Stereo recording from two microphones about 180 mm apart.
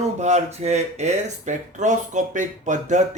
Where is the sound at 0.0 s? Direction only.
40° right (ahead or behind).